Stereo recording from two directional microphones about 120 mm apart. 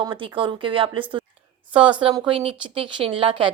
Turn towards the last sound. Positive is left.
turn(degrees=-45)  # may be behind; listen again after turning